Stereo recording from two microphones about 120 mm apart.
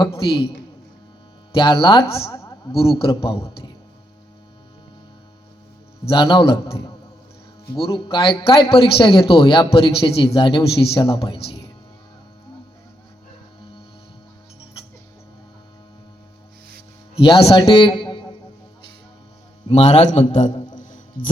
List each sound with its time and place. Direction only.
0.1 s a man's voice: 50° left (ahead or behind)
1.5 s a man's voice: 50° left (ahead or behind)
6.1 s a man's voice: 50° left (ahead or behind)
17.2 s a man's voice: 50° left (ahead or behind)
19.6 s a man's voice: 65° left (ahead or behind); by 20.5 s 90° left